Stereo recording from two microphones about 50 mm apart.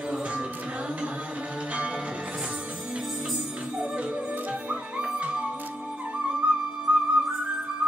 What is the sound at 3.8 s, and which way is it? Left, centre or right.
Music, right.